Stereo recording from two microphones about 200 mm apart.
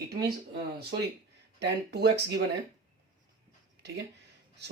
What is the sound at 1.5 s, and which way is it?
Speech, 55° right (ahead or behind).